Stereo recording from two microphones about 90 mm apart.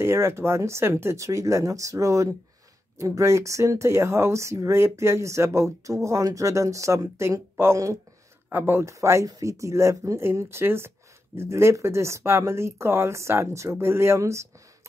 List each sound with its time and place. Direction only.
0.0 s speech: 30° right (ahead or behind)